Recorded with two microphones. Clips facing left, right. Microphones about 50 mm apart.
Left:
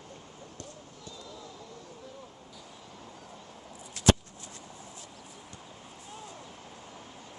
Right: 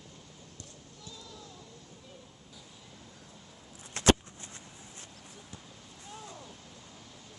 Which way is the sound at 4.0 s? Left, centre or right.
Right.